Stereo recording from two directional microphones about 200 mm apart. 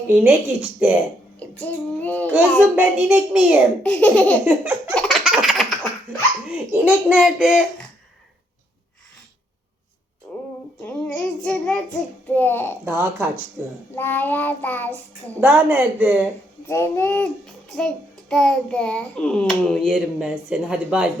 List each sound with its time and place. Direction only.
0.1 s a child's voice: 10° right (ahead or behind)
1.4 s child singing: 5° left (ahead or behind)
2.3 s a child's voice: 5° right (ahead or behind)
3.8 s child singing: 5° left (ahead or behind)
4.4 s a child's voice: 10° right (ahead or behind)
4.9 s laughter: centre (ahead or behind)
6.5 s a child's voice: 5° right (ahead or behind)
10.3 s a sound: 10° left (ahead or behind)
10.8 s child singing: 5° left (ahead or behind)
12.8 s a child's voice: 10° right (ahead or behind)
13.9 s child singing: 10° left (ahead or behind)
15.4 s a child's voice: 10° right (ahead or behind)
16.6 s a child's voice: 10° left (ahead or behind); by 21.1 s 5° right (ahead or behind)